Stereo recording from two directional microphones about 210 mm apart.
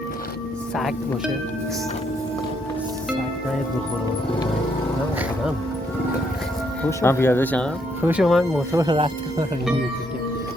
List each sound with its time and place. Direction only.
0.8 s speech: centre (ahead or behind)
6.8 s speech: 10° left (ahead or behind)
8.0 s speech: 5° right (ahead or behind)
8.7 s speech: 20° right (ahead or behind)